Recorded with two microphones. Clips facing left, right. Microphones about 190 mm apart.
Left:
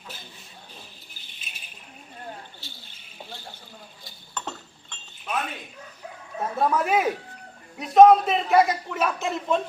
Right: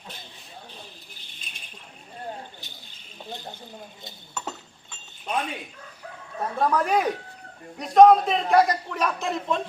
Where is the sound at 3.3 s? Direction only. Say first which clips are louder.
Right 6 dB; 20° right (ahead or behind).